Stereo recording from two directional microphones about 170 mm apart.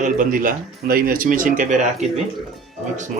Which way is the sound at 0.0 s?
50° right (ahead or behind).